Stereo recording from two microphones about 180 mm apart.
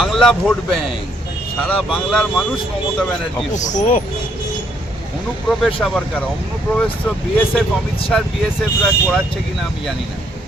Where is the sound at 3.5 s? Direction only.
40° left (ahead or behind).